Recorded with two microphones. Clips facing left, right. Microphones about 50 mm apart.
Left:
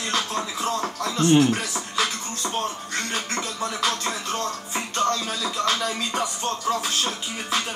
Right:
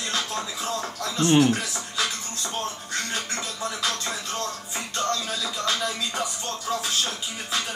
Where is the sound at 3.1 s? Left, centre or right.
Left.